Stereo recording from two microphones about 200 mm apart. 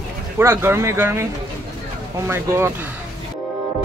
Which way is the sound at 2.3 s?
15° right (ahead or behind).